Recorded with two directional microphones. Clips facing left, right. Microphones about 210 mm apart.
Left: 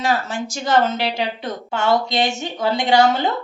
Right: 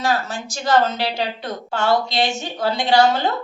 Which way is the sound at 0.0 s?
25° left (ahead or behind).